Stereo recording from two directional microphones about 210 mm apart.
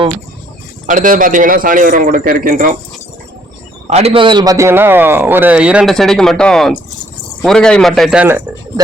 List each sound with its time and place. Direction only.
0.9 s a man's voice: 40° right (ahead or behind)
3.8 s a man's voice: 30° right (ahead or behind); by 8.4 s 5° right (ahead or behind)